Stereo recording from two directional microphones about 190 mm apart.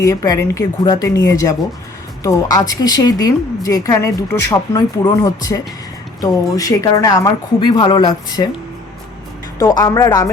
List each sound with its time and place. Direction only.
0.0 s a woman's voice: 15° left (ahead or behind)
9.6 s a woman's voice: 20° left (ahead or behind)